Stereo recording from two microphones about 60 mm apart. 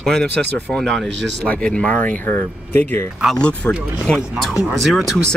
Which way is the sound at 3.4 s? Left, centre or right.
Centre.